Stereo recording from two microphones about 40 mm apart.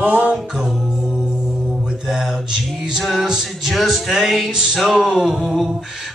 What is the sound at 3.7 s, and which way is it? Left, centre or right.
Music, centre.